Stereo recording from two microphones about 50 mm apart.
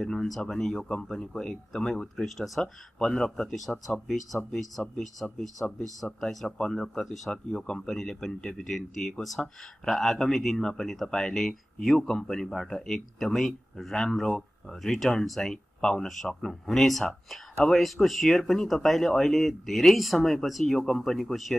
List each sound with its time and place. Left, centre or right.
0.0 s speech: centre
2.6 s speech: centre